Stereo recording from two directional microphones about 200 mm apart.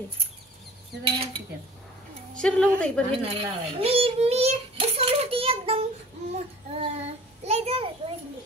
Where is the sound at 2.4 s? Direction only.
5° left (ahead or behind).